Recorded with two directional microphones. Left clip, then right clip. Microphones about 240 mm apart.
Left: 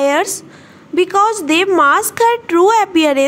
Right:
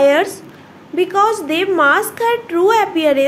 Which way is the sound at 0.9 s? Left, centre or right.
Left.